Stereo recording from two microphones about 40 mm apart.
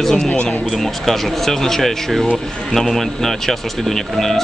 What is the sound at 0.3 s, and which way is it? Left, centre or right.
Speech, left.